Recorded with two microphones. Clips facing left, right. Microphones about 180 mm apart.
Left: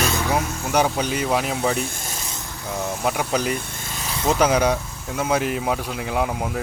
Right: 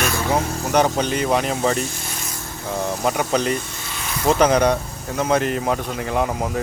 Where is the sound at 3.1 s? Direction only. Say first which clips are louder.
Right 2 dB; 5° left (ahead or behind).